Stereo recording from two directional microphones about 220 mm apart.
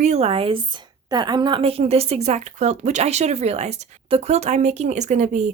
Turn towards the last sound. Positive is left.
turn(degrees=-35)  # may be behind; listen again after turning